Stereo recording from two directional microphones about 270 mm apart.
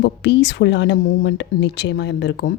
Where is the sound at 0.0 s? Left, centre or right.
Left.